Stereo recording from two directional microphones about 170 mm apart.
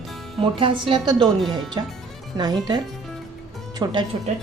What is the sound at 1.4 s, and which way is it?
Speech, centre (ahead or behind).